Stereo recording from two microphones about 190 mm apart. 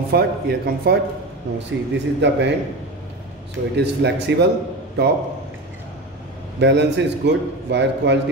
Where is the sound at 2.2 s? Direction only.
70° right (ahead or behind).